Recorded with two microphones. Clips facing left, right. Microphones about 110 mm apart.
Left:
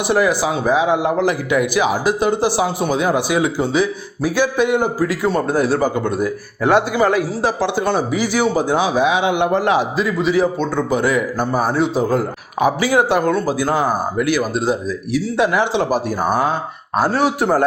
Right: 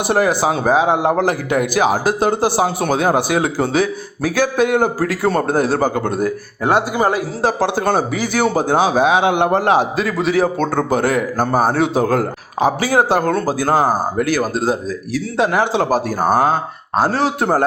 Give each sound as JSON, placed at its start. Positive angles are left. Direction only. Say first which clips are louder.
{"t": 0.1, "sound": "a man's voice", "louder": "right 1 dB", "side_deg": -40}
{"t": 4.9, "sound": "a man's voice", "louder": "right 1 dB", "side_deg": -55}
{"t": 10.0, "sound": "a man's voice", "louder": "even", "side_deg": -60}
{"t": 12.5, "sound": "speech", "louder": "even", "side_deg": -35}
{"t": 16.9, "sound": "speech", "louder": "even", "side_deg": -30}